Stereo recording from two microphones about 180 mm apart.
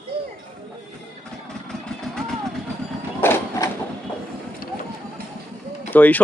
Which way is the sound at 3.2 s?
15° left (ahead or behind).